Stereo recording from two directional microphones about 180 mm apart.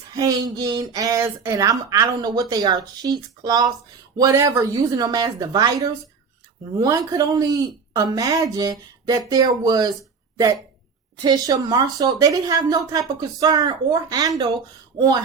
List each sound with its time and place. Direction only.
0.1 s speech: 20° right (ahead or behind)
11.2 s speech: 20° right (ahead or behind)